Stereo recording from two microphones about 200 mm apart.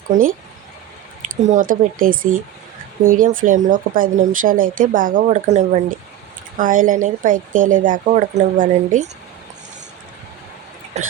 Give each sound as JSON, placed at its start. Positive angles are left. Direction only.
{"t": 0.1, "sound": "speech", "side_deg": -45}
{"t": 10.9, "sound": "hiccup", "side_deg": -35}